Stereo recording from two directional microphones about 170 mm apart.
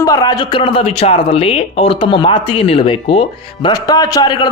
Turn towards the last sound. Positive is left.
turn(degrees=25)  # may be behind; listen again after turning